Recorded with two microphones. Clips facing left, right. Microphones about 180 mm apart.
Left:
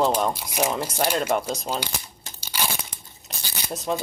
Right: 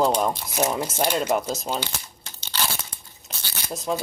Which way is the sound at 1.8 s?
10° left (ahead or behind).